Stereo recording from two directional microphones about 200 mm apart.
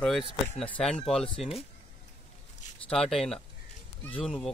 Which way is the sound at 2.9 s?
Centre (ahead or behind).